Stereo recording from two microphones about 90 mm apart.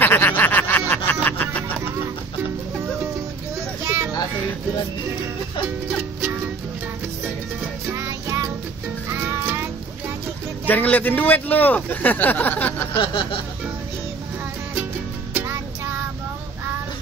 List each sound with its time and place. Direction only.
0.0 s a sound: 20° left (ahead or behind)
3.8 s children playing: 25° right (ahead or behind)
7.9 s music: 30° right (ahead or behind)
10.7 s speech: 20° left (ahead or behind)
12.9 s a sound: 75° left (ahead or behind)
15.3 s music: 25° right (ahead or behind)